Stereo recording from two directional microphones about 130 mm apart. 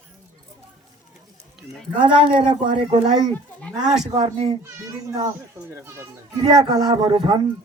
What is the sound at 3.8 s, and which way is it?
Speech, 5° right (ahead or behind).